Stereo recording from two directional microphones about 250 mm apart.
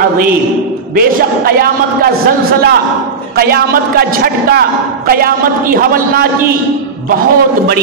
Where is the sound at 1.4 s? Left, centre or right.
Right.